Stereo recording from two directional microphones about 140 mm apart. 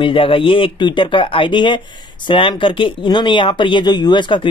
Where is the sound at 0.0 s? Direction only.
40° left (ahead or behind).